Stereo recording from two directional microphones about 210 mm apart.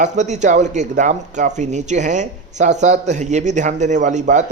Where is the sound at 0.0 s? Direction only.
35° right (ahead or behind).